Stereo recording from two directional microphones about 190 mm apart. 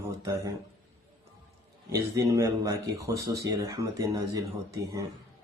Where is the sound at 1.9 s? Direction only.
15° right (ahead or behind).